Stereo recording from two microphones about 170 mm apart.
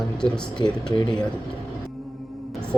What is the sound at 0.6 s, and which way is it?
Speech, 25° left (ahead or behind).